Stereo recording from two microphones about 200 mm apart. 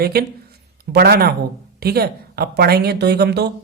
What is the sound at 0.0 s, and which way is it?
A man's voice, 50° right (ahead or behind).